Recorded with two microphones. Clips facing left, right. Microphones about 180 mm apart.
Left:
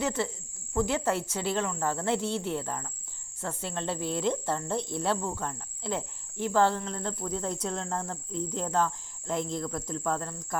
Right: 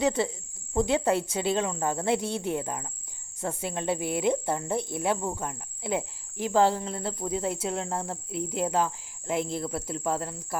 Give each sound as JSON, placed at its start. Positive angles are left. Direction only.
{"t": 0.0, "sound": "speech", "side_deg": -15}